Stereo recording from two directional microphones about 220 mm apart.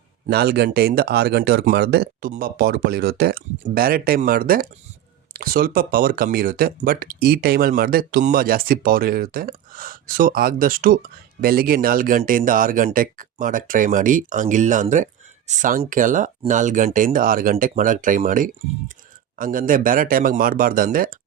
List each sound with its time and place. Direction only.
0.3 s speech: 45° right (ahead or behind)